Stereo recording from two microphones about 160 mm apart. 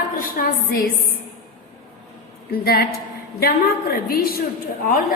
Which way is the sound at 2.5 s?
70° left (ahead or behind).